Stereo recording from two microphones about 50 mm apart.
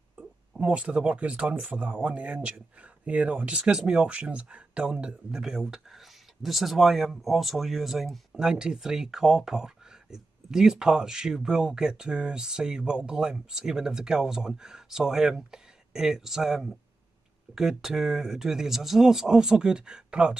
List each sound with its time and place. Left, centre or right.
0.6 s speech: right; by 8.4 s centre
8.4 s speech: centre